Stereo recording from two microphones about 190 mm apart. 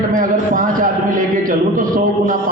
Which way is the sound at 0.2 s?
45° right (ahead or behind).